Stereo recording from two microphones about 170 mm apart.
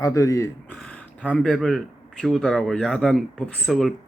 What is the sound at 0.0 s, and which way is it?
Speech, 20° left (ahead or behind).